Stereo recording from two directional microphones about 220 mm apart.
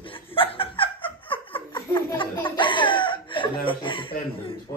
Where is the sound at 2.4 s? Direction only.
20° left (ahead or behind).